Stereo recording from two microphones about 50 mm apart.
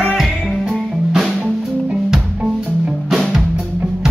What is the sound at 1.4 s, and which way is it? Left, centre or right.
Music, centre.